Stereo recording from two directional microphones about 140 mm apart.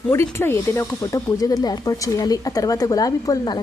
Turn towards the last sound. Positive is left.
turn(degrees=30)  # may be behind; listen again after turning